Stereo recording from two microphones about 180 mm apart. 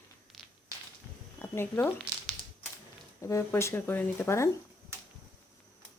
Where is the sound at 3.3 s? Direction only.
15° left (ahead or behind).